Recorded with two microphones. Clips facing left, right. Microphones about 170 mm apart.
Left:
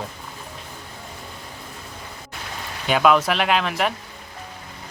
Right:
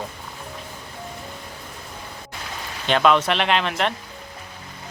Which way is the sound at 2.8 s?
5° left (ahead or behind).